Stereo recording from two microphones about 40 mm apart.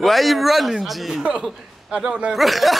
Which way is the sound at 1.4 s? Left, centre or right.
Centre.